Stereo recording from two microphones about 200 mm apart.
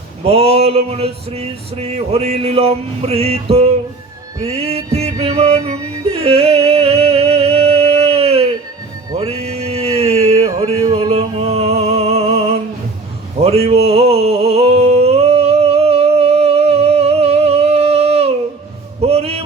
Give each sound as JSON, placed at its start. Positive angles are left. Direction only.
{"t": 0.3, "sound": "male singing", "side_deg": -30}
{"t": 6.2, "sound": "yodeling", "side_deg": -30}
{"t": 6.7, "sound": "music", "side_deg": -30}
{"t": 9.1, "sound": "mantra", "side_deg": -30}
{"t": 10.8, "sound": "music", "side_deg": -25}
{"t": 13.4, "sound": "a sound", "side_deg": -30}